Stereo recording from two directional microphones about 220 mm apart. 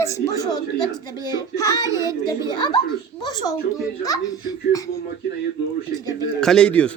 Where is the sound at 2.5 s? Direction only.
20° left (ahead or behind).